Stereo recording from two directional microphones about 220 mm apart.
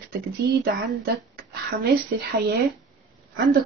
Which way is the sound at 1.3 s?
45° right (ahead or behind).